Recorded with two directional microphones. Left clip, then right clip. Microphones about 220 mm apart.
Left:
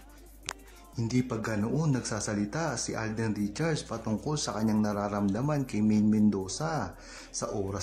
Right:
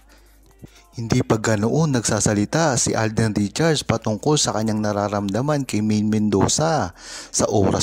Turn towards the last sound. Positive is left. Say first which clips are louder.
# right 15 dB
turn(degrees=-40)  # may be behind; listen again after turning